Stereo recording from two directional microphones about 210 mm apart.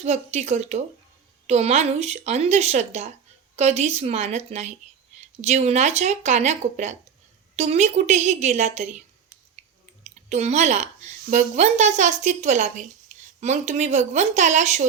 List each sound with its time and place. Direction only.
0.0 s a woman's voice: 30° right (ahead or behind)
10.0 s a woman's voice: 30° right (ahead or behind)